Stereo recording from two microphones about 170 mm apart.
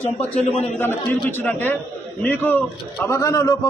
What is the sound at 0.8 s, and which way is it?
A man's voice, 10° left (ahead or behind).